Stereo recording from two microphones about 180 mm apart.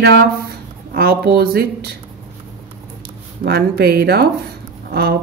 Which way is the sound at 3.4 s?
60° right (ahead or behind).